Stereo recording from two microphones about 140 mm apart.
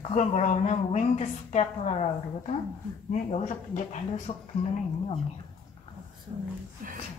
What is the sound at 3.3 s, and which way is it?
A woman's voice, 50° left (ahead or behind).